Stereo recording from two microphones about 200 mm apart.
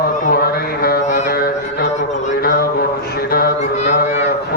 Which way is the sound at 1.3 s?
50° left (ahead or behind).